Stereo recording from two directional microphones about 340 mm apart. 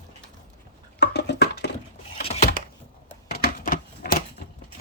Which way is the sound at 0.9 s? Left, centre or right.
Left.